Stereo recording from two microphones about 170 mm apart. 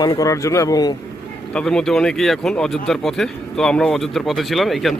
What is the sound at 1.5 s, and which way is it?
Speech, 5° left (ahead or behind).